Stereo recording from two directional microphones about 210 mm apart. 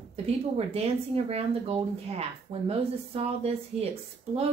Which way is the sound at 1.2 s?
30° right (ahead or behind).